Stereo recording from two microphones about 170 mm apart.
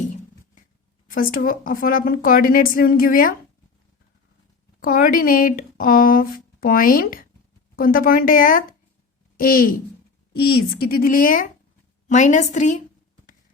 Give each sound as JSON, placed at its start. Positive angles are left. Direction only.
{"t": 1.1, "sound": "speech", "side_deg": 55}
{"t": 4.8, "sound": "a woman's voice", "side_deg": 60}